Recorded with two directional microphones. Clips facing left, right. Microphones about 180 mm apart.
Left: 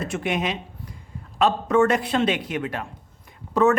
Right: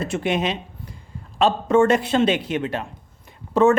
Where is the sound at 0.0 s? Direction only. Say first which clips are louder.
Right 3 dB; 30° right (ahead or behind).